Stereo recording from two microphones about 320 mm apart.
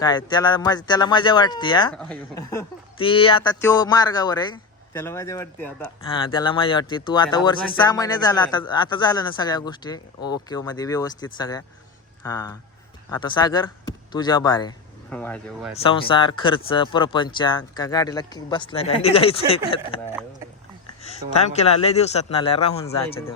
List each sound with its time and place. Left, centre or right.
0.0 s speech: centre
1.9 s speech: centre
15.7 s speech: centre
21.0 s a man's voice: centre